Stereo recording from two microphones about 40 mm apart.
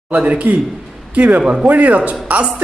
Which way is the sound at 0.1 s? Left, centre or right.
Right.